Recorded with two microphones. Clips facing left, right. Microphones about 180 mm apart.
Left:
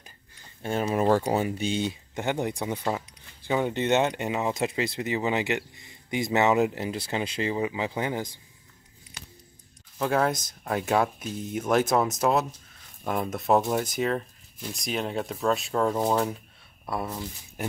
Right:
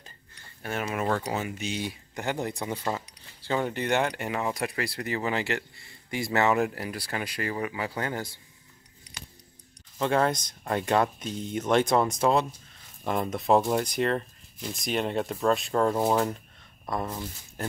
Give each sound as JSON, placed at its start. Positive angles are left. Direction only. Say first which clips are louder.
{"t": 0.6, "sound": "speech", "louder": "left 5 dB", "side_deg": 30}
{"t": 9.9, "sound": "speech", "louder": "even", "side_deg": 5}